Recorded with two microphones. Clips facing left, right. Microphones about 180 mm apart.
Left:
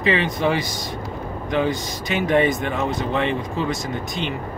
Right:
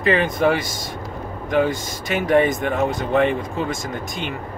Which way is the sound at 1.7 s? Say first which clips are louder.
Even; 45° right (ahead or behind).